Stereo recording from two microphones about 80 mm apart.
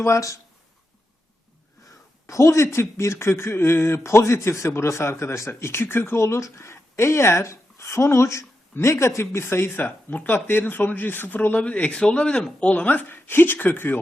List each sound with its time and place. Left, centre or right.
0.0 s a man's voice: left
2.2 s a man's voice: left